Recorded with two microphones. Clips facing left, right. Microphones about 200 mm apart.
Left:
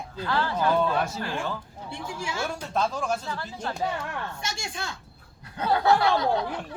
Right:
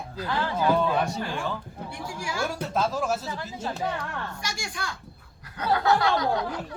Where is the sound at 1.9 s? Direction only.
25° left (ahead or behind).